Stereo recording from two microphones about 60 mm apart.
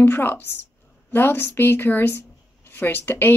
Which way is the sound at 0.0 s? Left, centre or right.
Left.